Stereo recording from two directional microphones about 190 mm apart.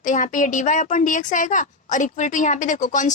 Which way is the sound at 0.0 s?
40° left (ahead or behind).